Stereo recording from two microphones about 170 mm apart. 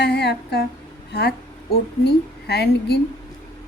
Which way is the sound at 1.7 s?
75° left (ahead or behind).